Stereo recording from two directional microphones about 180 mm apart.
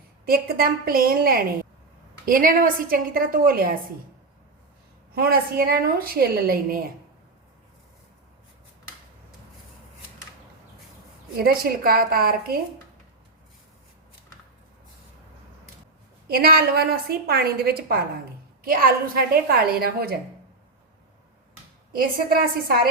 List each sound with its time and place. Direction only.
0.3 s a woman's voice: 55° right (ahead or behind)
5.1 s a woman's voice: 60° right (ahead or behind)
11.3 s a woman's voice: 55° right (ahead or behind)
16.4 s a woman's voice: 55° right (ahead or behind)
21.9 s a woman's voice: 55° right (ahead or behind)